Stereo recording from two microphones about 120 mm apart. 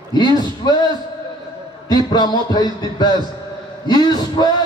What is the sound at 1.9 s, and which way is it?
A man's voice, 40° left (ahead or behind).